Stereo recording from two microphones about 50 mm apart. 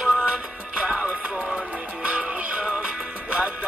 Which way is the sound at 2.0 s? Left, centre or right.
Right.